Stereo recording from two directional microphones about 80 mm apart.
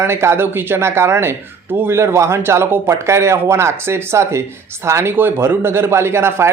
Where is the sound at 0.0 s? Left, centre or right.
Right.